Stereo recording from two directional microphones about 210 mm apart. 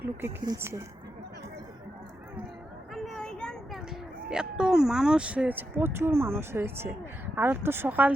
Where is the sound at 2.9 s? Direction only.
Centre (ahead or behind).